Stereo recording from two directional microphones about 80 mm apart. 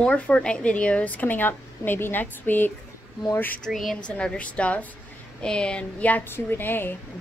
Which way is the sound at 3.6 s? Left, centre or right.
Centre.